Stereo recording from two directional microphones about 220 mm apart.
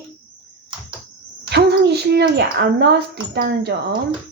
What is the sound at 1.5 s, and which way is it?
A woman's voice, 50° right (ahead or behind).